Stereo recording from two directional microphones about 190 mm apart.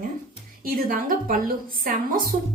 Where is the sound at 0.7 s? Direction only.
50° right (ahead or behind).